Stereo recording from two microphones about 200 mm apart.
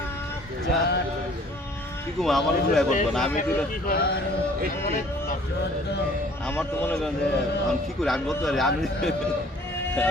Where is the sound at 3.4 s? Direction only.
45° left (ahead or behind).